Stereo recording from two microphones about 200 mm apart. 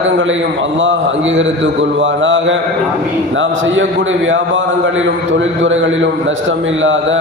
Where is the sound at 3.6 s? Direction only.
70° right (ahead or behind).